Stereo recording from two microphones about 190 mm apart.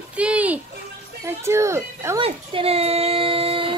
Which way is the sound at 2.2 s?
30° right (ahead or behind).